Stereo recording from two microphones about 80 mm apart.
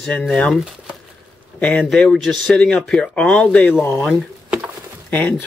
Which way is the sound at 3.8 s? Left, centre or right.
Left.